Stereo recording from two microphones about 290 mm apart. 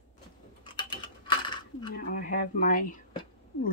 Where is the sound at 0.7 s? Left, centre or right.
Centre.